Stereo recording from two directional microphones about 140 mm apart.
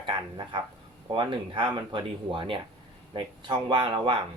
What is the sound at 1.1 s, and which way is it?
Speech, 35° right (ahead or behind).